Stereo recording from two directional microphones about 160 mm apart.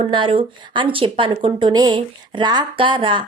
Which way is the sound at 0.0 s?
35° right (ahead or behind).